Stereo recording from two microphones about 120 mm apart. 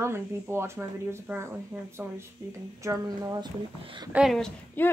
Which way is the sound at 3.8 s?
40° right (ahead or behind).